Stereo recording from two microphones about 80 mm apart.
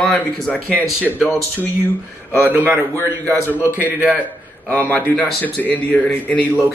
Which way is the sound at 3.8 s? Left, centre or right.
Right.